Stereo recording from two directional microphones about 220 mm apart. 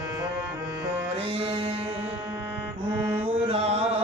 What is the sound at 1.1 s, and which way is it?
Music, 25° right (ahead or behind).